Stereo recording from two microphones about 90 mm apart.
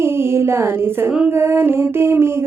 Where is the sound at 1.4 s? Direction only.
25° right (ahead or behind).